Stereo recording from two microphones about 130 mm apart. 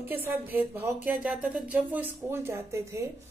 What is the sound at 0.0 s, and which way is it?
Speech, 15° right (ahead or behind).